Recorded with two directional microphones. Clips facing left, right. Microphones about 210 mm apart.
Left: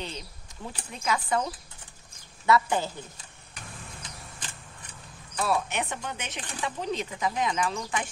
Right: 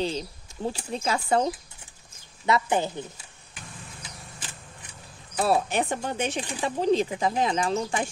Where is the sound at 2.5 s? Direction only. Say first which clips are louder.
Even; 20° right (ahead or behind).